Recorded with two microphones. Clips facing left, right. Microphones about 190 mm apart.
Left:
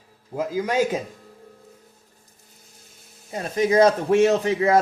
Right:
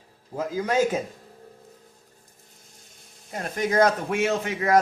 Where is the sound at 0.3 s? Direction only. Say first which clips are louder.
Left 2 dB; 15° left (ahead or behind).